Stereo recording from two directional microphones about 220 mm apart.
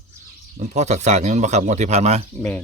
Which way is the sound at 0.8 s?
30° right (ahead or behind).